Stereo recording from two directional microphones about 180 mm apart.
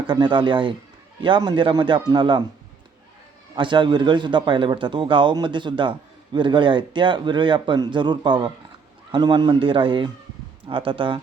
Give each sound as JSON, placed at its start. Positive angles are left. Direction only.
{"t": 0.1, "sound": "speech", "side_deg": -25}
{"t": 3.5, "sound": "speech", "side_deg": -25}